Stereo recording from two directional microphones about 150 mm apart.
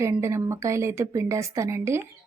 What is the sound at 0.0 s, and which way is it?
A woman's voice, 20° right (ahead or behind).